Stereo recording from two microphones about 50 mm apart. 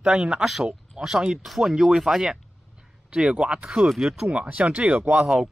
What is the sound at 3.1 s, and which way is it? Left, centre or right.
Speech, centre.